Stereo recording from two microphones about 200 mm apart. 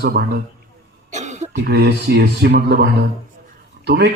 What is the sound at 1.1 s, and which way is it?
Cough, 35° right (ahead or behind).